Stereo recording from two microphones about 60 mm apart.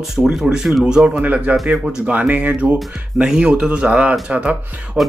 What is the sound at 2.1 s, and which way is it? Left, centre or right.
Speech, right.